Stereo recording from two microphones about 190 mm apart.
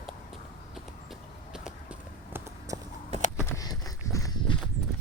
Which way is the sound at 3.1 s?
35° right (ahead or behind).